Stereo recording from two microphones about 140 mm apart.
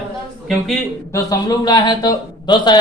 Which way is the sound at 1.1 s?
25° left (ahead or behind).